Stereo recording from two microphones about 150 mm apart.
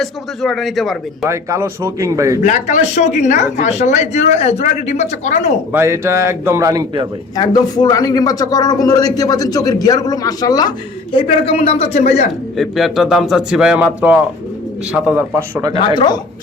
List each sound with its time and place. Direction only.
0.0 s a man's voice: centre (ahead or behind)
1.2 s a man's voice: 20° right (ahead or behind)
2.4 s speech: 55° left (ahead or behind)
5.7 s a man's voice: 15° right (ahead or behind)
7.3 s a man's voice: 25° left (ahead or behind); by 12.0 s 40° left (ahead or behind)
12.5 s a man's voice: centre (ahead or behind)
16.0 s a man's voice: 30° left (ahead or behind)